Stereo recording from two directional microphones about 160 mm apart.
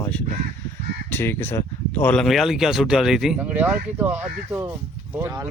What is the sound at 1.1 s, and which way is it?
Speech, 15° left (ahead or behind).